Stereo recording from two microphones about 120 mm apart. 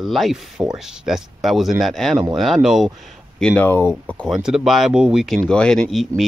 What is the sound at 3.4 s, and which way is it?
Speech, 10° left (ahead or behind).